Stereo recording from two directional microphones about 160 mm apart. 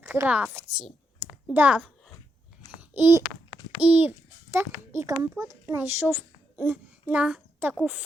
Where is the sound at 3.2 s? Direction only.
25° left (ahead or behind).